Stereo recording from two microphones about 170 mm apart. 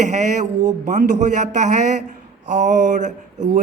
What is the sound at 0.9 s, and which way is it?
Speech, 45° right (ahead or behind).